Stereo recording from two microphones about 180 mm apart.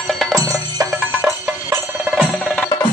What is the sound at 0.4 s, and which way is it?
Music, 20° right (ahead or behind).